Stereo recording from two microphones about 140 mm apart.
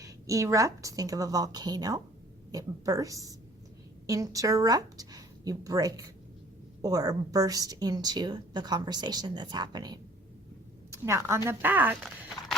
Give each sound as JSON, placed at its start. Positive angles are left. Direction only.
{"t": 0.0, "sound": "a woman's voice", "side_deg": -20}
{"t": 10.9, "sound": "a woman's voice", "side_deg": -20}